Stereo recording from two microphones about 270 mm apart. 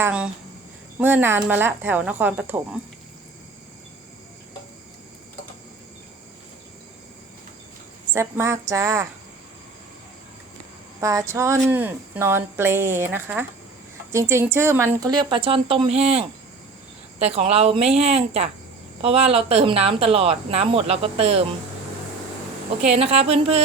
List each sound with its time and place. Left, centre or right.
0.0 s a woman's voice: centre
8.1 s a woman's voice: centre
11.0 s a woman's voice: centre
22.9 s speech: right